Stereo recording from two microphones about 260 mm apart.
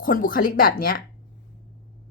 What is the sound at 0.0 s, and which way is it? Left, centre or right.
A woman's voice, left.